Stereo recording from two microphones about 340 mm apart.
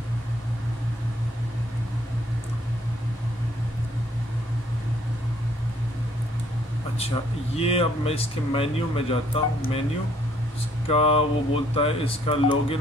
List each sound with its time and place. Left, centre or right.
7.5 s speech: centre
10.9 s speech: centre